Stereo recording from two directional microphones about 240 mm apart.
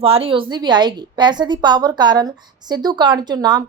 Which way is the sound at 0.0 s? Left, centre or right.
Right.